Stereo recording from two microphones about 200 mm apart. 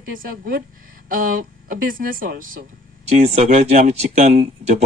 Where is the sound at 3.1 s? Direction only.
30° right (ahead or behind).